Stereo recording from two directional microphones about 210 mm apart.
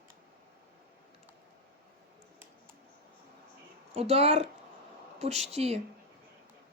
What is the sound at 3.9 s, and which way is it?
Speech, 30° right (ahead or behind).